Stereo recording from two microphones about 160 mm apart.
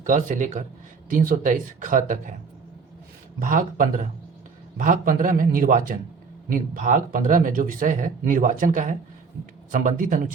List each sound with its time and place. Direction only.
0.0 s speech: 55° right (ahead or behind)
3.4 s speech: 55° right (ahead or behind)